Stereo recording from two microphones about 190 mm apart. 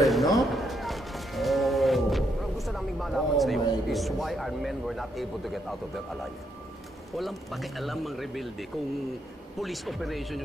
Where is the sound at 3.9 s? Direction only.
Centre (ahead or behind).